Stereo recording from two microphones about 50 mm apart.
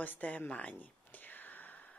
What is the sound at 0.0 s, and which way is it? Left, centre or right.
Whispering, left.